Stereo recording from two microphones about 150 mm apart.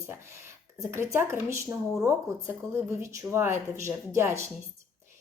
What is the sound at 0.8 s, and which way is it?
Speech, 15° right (ahead or behind).